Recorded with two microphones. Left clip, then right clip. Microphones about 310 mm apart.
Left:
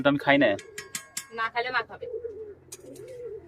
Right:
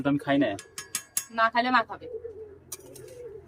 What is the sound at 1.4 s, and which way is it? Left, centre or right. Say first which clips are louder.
Cutlery: right 5 dB; centre.